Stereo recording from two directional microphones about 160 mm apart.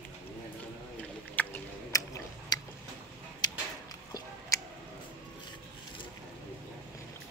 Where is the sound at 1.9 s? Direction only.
20° left (ahead or behind).